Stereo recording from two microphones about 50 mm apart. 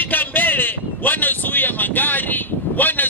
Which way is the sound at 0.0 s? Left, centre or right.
Left.